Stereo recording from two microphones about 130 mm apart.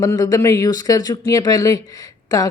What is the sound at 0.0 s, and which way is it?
A woman's voice, 25° left (ahead or behind).